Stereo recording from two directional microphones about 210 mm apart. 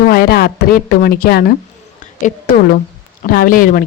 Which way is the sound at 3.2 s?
45° left (ahead or behind).